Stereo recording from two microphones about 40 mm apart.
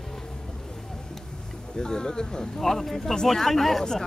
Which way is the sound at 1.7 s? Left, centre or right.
Centre.